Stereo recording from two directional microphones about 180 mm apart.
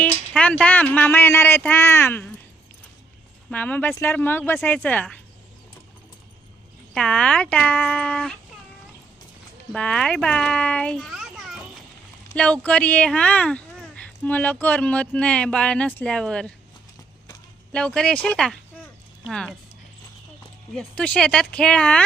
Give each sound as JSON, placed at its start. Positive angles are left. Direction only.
{"t": 0.0, "sound": "speech", "side_deg": 5}
{"t": 3.5, "sound": "speech", "side_deg": 10}
{"t": 6.9, "sound": "speech", "side_deg": 5}
{"t": 9.7, "sound": "a child's voice", "side_deg": 5}
{"t": 17.7, "sound": "speech", "side_deg": 5}
{"t": 20.7, "sound": "speech", "side_deg": 5}